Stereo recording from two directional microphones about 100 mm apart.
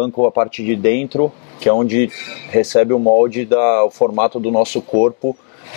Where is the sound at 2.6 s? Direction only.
15° left (ahead or behind).